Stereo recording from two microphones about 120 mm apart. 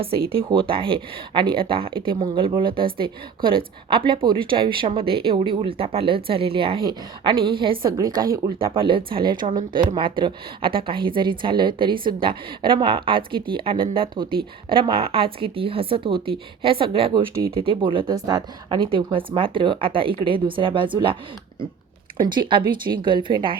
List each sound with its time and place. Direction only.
0.0 s speech: 50° right (ahead or behind)
7.9 s a woman's voice: 30° right (ahead or behind)
8.5 s speech: 50° right (ahead or behind)
18.1 s a woman's voice: 35° right (ahead or behind)
18.9 s speech: 45° right (ahead or behind)
22.4 s speech: 45° right (ahead or behind)